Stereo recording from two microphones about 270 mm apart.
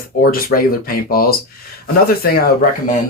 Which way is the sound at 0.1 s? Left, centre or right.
Left.